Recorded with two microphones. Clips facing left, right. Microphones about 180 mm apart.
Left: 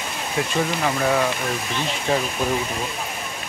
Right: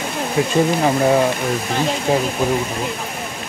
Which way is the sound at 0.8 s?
30° right (ahead or behind).